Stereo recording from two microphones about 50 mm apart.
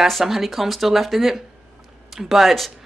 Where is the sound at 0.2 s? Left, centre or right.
Centre.